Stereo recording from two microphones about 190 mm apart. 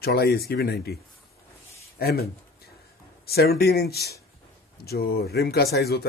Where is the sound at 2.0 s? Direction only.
55° left (ahead or behind).